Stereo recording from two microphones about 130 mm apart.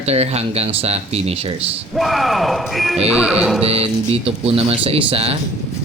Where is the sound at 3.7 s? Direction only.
50° right (ahead or behind).